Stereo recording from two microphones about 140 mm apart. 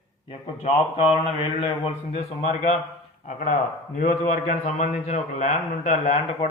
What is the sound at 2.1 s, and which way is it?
Speech, 50° left (ahead or behind).